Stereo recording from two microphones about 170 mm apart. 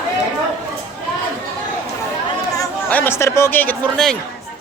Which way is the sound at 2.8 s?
10° left (ahead or behind).